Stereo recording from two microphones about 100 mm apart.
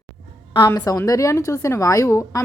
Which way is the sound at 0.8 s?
35° left (ahead or behind).